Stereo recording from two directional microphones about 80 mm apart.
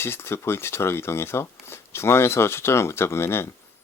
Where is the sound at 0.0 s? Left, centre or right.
Left.